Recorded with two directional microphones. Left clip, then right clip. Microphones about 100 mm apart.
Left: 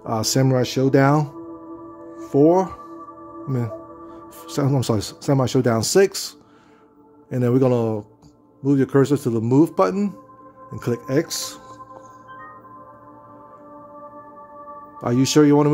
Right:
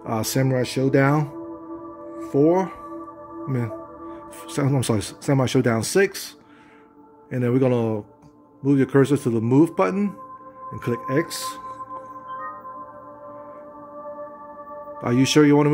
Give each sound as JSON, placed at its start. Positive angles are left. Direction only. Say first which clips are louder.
{"t": 0.0, "sound": "speech", "louder": "left 3 dB", "side_deg": 20}
{"t": 0.4, "sound": "speech", "louder": "left 2 dB", "side_deg": 40}
{"t": 2.3, "sound": "speech", "louder": "left 3 dB", "side_deg": 50}
{"t": 4.5, "sound": "speech", "louder": "left 2 dB", "side_deg": 20}
{"t": 5.9, "sound": "a man's voice", "louder": "left 3 dB", "side_deg": 35}
{"t": 15.0, "sound": "a man's voice", "louder": "left 1 dB", "side_deg": 10}